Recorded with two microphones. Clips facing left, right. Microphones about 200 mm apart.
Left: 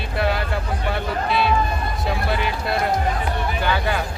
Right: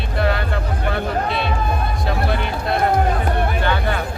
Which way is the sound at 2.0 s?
Centre (ahead or behind).